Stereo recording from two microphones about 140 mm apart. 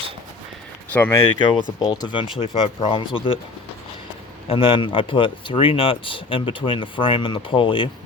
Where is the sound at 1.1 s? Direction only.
30° left (ahead or behind).